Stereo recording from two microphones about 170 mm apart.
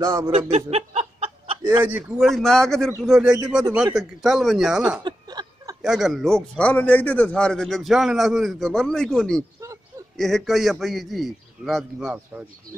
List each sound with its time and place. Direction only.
0.0 s speech: 20° right (ahead or behind)
0.5 s snicker: 40° right (ahead or behind)
1.6 s a man's voice: 10° right (ahead or behind)
5.0 s a sound: 25° right (ahead or behind)
5.8 s a man's voice: centre (ahead or behind)